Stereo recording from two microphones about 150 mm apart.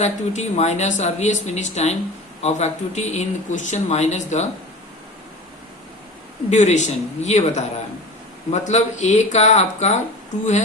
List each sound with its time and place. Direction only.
0.0 s speech: 50° left (ahead or behind)
6.5 s speech: 50° left (ahead or behind)